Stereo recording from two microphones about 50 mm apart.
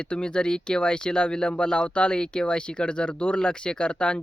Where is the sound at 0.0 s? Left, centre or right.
Centre.